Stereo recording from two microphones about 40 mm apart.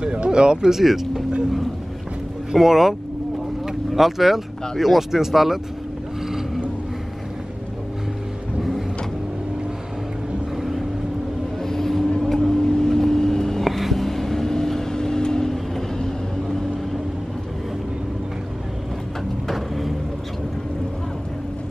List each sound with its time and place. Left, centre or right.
0.0 s speech: right
0.7 s speech: centre
2.5 s speech: centre
6.2 s vehicle: centre
8.5 s vehicle: centre
10.5 s vehicle: centre
11.6 s vehicle: centre
13.7 s vehicle: centre
19.5 s vehicle: centre